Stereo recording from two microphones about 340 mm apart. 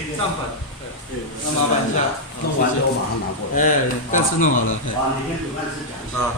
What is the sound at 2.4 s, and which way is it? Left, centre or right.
Speech, left.